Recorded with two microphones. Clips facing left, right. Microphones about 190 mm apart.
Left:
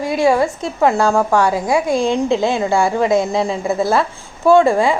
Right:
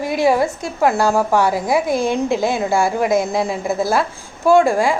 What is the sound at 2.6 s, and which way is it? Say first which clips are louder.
Speech: left 2 dB; 5° right (ahead or behind).